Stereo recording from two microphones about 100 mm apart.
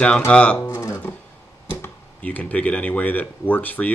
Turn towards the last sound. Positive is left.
turn(degrees=15)  # may be behind; listen again after turning